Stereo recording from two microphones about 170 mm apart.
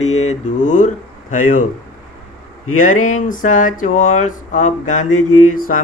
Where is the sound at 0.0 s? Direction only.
40° left (ahead or behind).